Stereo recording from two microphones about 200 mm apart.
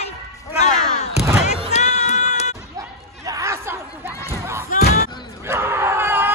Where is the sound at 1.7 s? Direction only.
35° left (ahead or behind).